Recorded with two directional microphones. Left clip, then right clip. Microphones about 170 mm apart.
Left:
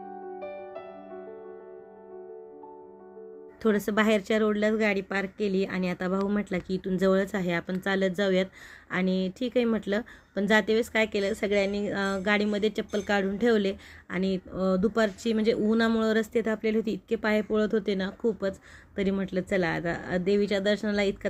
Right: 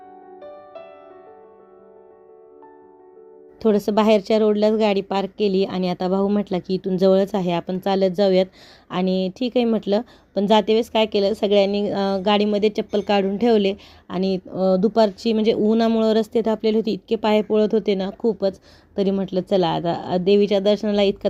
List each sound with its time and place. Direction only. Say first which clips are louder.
3.6 s a woman's voice: right 7 dB; 15° right (ahead or behind)
14.7 s speech: right 8 dB; 10° left (ahead or behind)
14.9 s speech: right 8 dB; 15° right (ahead or behind)